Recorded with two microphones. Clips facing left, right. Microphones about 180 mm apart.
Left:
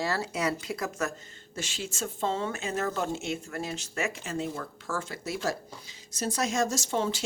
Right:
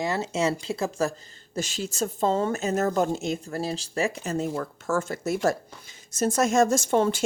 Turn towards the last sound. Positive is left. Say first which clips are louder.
# right 7 dB
turn(degrees=-55)  # may be behind; listen again after turning